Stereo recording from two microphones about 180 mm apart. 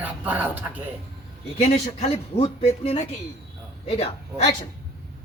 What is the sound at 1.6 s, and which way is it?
A man's voice, 35° left (ahead or behind).